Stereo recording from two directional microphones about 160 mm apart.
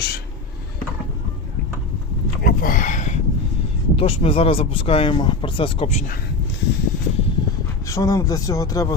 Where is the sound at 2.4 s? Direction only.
60° left (ahead or behind).